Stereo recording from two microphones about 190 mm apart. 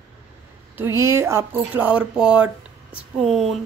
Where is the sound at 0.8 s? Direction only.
15° right (ahead or behind).